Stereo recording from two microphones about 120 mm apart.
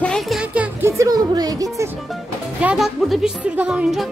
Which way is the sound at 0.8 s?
30° right (ahead or behind).